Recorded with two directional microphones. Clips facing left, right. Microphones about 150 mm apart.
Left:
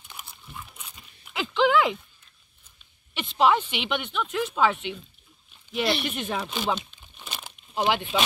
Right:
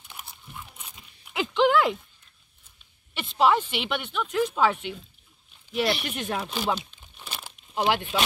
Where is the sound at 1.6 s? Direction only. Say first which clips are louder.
Even; 10° left (ahead or behind).